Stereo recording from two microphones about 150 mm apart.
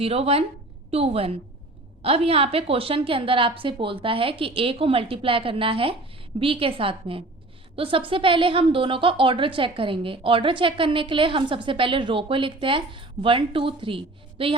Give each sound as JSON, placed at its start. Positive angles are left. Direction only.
{"t": 0.0, "sound": "a woman's voice", "side_deg": -40}